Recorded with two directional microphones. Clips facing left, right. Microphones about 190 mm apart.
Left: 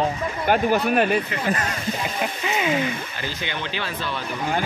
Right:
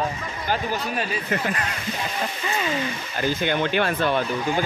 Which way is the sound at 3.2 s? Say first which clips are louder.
Right 7 dB; 50° right (ahead or behind).